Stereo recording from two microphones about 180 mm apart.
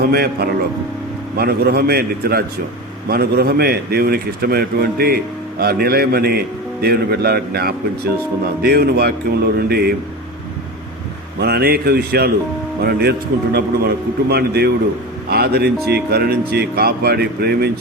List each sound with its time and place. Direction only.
0.0 s a man's voice: 60° right (ahead or behind)
11.3 s a man's voice: 60° right (ahead or behind)